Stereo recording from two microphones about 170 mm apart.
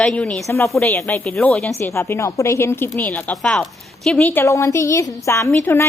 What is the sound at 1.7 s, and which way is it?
A woman's voice, 15° left (ahead or behind).